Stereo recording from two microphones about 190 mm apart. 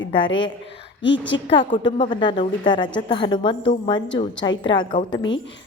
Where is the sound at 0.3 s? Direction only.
75° left (ahead or behind).